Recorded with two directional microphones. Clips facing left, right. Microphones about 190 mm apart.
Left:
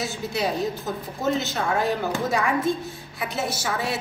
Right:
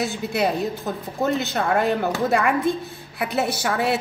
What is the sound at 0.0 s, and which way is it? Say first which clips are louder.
A woman's voice: right 4 dB; 60° right (ahead or behind).